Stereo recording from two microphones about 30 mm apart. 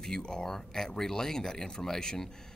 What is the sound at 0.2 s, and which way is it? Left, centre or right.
Speech, left.